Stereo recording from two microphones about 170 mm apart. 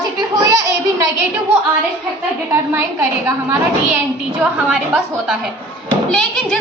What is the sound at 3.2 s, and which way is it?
Speech, 15° right (ahead or behind).